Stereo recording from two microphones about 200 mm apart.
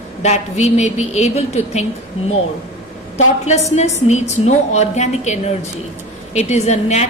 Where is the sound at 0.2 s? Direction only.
35° left (ahead or behind).